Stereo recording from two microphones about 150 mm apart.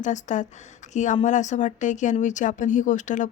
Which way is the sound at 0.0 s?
55° left (ahead or behind).